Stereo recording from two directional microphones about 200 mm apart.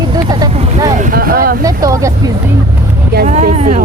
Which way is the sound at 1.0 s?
45° right (ahead or behind).